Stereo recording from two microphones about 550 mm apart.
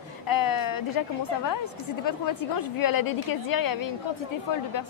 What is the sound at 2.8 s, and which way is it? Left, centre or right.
Speech, left.